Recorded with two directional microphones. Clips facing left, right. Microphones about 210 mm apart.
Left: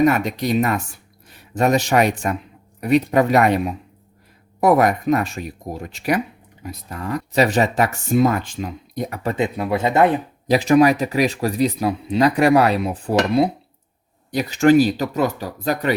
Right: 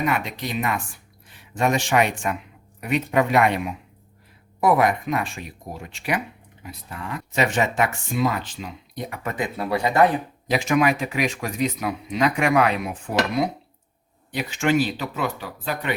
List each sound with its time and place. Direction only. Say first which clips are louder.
0.0 s a man's voice: left 8 dB; 40° left (ahead or behind)
9.3 s speech: left 4 dB; 20° left (ahead or behind)
10.4 s speech: left 7 dB; 35° left (ahead or behind)